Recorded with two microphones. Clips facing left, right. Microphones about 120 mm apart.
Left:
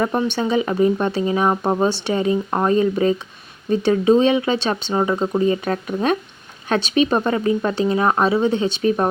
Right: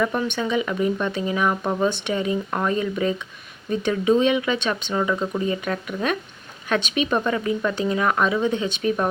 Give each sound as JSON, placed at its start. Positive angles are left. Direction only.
{"t": 0.0, "sound": "speech", "side_deg": 35}